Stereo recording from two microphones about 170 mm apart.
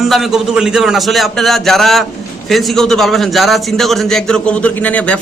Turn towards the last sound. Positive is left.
turn(degrees=10)  # may be behind; listen again after turning